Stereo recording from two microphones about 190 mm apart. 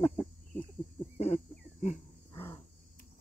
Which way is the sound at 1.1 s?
35° left (ahead or behind).